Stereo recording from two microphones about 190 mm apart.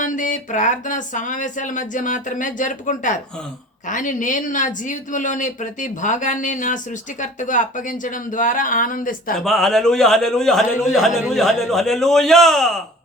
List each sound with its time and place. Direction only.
0.0 s speech: 40° left (ahead or behind)
9.4 s speech: centre (ahead or behind)